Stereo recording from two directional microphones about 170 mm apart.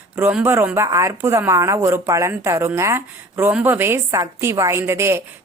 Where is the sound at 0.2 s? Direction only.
10° right (ahead or behind).